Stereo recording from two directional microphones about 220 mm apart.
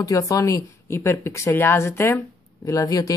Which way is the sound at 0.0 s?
15° left (ahead or behind).